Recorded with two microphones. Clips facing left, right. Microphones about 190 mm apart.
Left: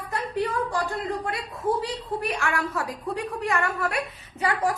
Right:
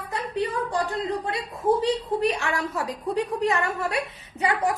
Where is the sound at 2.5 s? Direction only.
20° right (ahead or behind).